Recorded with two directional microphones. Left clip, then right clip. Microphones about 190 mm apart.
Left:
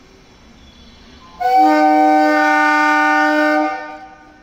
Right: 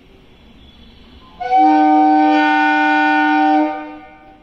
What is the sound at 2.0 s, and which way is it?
Shofar, 30° left (ahead or behind).